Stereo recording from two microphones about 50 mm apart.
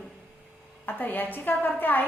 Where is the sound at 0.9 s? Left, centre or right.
Left.